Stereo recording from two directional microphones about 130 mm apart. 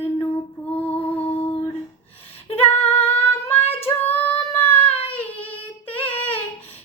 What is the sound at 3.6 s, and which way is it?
Female singing, 50° left (ahead or behind).